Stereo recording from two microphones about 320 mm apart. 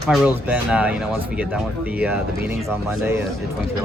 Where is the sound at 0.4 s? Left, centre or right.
Centre.